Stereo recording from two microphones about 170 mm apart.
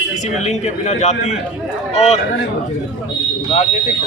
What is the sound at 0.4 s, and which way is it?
Speech, 40° left (ahead or behind).